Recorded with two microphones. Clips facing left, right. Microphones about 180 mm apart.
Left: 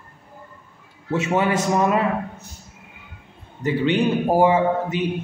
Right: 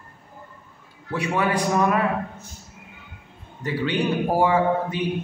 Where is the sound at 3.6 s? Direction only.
20° left (ahead or behind).